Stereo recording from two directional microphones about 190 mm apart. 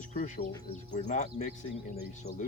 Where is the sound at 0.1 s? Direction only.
40° left (ahead or behind).